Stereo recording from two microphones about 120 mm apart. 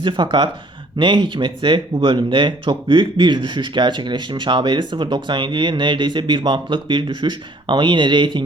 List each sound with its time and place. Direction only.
0.0 s speech: 45° right (ahead or behind)